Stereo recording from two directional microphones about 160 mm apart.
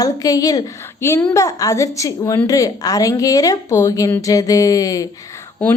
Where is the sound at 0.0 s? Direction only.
25° left (ahead or behind).